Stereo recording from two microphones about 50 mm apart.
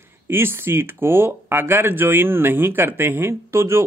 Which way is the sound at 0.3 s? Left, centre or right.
Right.